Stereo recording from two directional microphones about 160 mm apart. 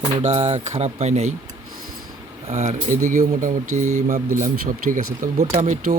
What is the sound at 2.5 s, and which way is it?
Speech, 45° right (ahead or behind).